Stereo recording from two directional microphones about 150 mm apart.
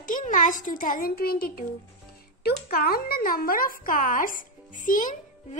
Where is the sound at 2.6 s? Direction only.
85° left.